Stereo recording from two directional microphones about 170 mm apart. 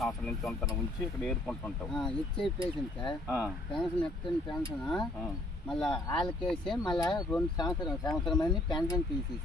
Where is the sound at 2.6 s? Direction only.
25° left (ahead or behind).